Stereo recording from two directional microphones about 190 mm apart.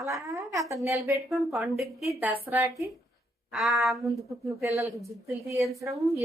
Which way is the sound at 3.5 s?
Centre (ahead or behind).